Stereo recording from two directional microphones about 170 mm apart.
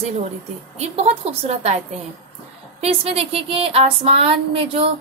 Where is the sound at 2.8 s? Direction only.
35° right (ahead or behind).